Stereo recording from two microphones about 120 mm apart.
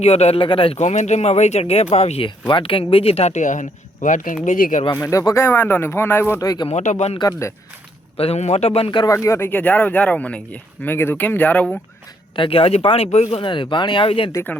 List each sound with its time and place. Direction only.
0.0 s speech: 60° left (ahead or behind)
0.4 s speech: 45° left (ahead or behind)
0.8 s speech: 75° left (ahead or behind); by 2.3 s 55° left (ahead or behind)
2.5 s speech: 45° left (ahead or behind); by 4.9 s 90° left
4.9 s speech: 25° left (ahead or behind)
6.7 s speech: 70° left (ahead or behind)
7.2 s speech: 25° left (ahead or behind)
8.1 s speech: 55° left (ahead or behind)
9.0 s speech: 25° left (ahead or behind)
12.4 s speech: 50° left (ahead or behind)
13.4 s speech: 40° left (ahead or behind)